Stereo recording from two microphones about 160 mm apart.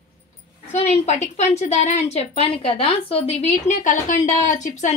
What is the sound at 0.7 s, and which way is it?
A woman's voice, 40° left (ahead or behind).